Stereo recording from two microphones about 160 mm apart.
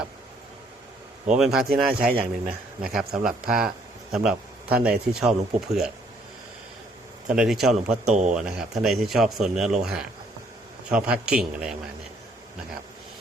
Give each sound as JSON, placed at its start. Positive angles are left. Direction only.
{"t": 1.4, "sound": "speech", "side_deg": -5}
{"t": 2.0, "sound": "speech", "side_deg": -65}
{"t": 2.8, "sound": "speech", "side_deg": -5}
{"t": 7.3, "sound": "speech", "side_deg": -5}
{"t": 8.0, "sound": "speech", "side_deg": -50}
{"t": 8.4, "sound": "a man's voice", "side_deg": -5}